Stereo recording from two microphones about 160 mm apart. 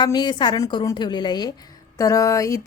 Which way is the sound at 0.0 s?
25° left (ahead or behind).